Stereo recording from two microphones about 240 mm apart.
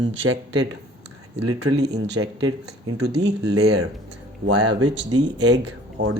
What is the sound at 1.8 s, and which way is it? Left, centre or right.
Speech, right.